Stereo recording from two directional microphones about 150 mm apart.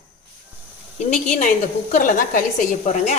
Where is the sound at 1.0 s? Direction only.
50° left (ahead or behind).